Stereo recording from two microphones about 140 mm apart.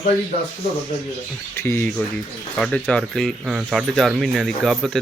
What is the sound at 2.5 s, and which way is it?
Speech, centre (ahead or behind).